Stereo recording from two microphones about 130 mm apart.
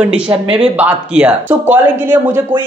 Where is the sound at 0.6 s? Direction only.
10° right (ahead or behind).